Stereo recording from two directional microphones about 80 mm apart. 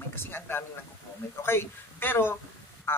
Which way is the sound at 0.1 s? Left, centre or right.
Left.